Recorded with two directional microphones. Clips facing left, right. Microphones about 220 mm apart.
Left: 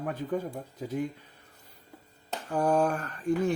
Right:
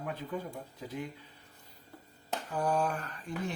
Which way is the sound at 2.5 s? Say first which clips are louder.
Left 6 dB; 45° left (ahead or behind).